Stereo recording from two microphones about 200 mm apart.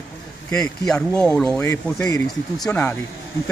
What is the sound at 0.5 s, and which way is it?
Speech, 5° left (ahead or behind).